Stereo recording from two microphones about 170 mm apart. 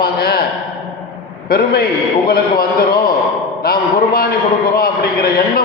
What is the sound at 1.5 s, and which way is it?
A man's voice, 65° left (ahead or behind).